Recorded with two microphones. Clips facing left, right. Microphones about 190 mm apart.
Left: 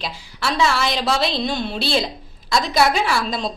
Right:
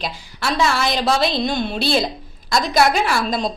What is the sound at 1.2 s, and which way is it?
Speech, 45° right (ahead or behind).